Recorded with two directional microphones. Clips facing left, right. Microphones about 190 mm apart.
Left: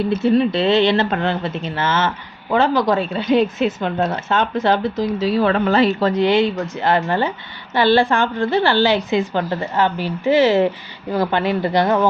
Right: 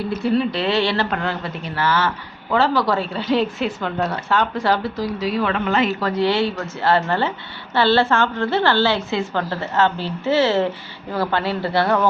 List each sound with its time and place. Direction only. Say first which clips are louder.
0.1 s speech: left 3 dB; 25° left (ahead or behind)
6.1 s a woman's voice: left 1 dB; 20° left (ahead or behind)